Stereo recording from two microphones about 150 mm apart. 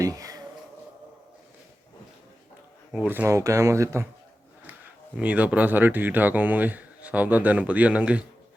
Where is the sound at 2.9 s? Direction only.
10° right (ahead or behind).